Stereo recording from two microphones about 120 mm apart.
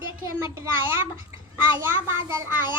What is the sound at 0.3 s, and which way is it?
A child's voice, 25° right (ahead or behind).